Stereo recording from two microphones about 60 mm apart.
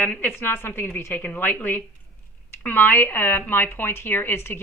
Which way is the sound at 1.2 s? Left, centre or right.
Left.